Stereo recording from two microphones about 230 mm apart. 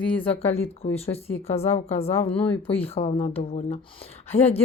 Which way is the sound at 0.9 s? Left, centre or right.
Left.